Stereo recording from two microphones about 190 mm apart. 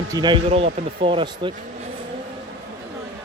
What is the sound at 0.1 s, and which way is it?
A man's voice, 25° right (ahead or behind).